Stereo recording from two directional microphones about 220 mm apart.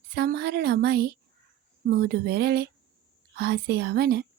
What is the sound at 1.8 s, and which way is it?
A woman's voice, 45° right (ahead or behind).